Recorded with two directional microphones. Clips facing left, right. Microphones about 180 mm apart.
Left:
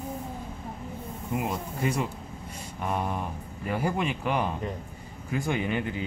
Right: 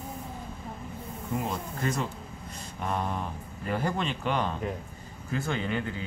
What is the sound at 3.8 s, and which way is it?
Speech, 10° left (ahead or behind).